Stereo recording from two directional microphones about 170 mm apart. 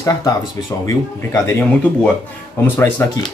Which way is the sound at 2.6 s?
10° left (ahead or behind).